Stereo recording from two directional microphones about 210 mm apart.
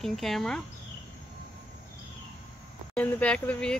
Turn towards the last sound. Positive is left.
turn(degrees=5)  # may be behind; listen again after turning